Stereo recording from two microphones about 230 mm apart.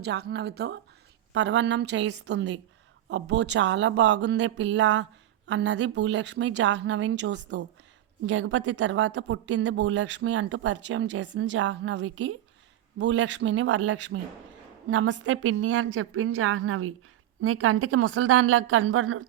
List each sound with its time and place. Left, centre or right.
0.0 s speech: right
15.2 s a woman's voice: right